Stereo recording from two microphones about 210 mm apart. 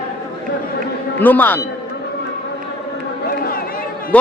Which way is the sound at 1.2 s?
10° left (ahead or behind).